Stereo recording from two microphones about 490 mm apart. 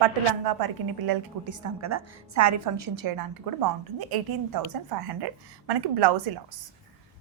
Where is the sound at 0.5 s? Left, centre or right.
Right.